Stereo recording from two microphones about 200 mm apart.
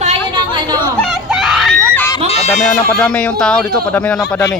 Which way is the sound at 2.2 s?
35° left (ahead or behind).